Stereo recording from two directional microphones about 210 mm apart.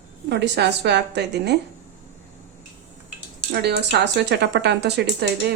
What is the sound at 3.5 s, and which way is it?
Speech, 50° right (ahead or behind).